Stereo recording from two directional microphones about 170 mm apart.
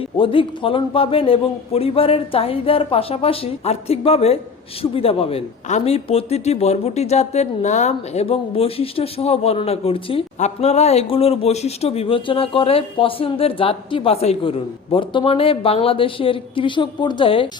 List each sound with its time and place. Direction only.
0.2 s a man's voice: 30° left (ahead or behind)